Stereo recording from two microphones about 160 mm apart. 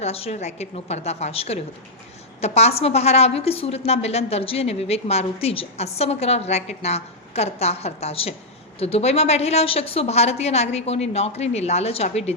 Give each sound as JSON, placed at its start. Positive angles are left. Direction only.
{"t": 0.0, "sound": "a woman's voice", "side_deg": 40}